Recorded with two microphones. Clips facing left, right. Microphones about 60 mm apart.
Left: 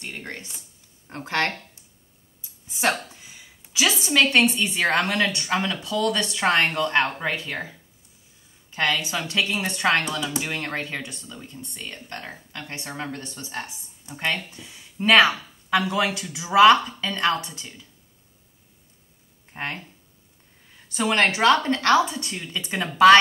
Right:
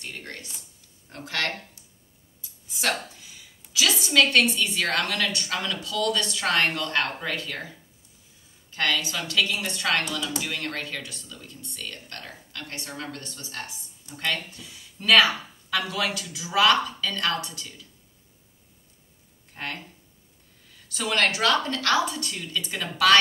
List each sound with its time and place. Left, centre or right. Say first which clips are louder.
0.0 s speech: left 3 dB; left
2.4 s a sound: left 4 dB; left
4.0 s speech: left 1 dB; left
8.7 s speech: left 2 dB; left
19.5 s speech: left 3 dB; left
20.9 s speech: left 3 dB; left